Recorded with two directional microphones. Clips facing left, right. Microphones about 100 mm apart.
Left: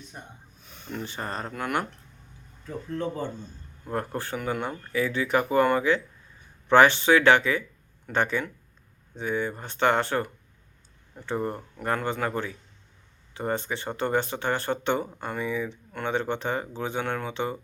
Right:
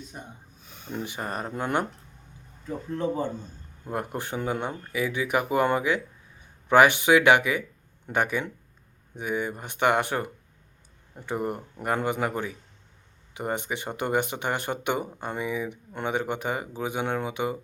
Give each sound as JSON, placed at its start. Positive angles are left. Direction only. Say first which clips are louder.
{"t": 0.9, "sound": "speech", "louder": "right 1 dB", "side_deg": -15}
{"t": 3.8, "sound": "speech", "louder": "left 1 dB", "side_deg": -15}